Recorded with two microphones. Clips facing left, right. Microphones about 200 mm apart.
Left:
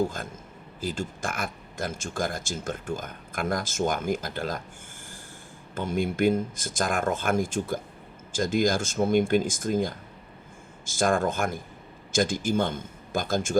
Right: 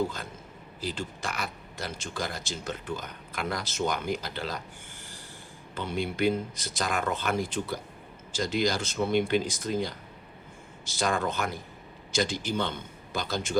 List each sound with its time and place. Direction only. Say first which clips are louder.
0.0 s speech: left 3 dB; 50° left (ahead or behind)
5.7 s speech: left 4 dB; 45° left (ahead or behind)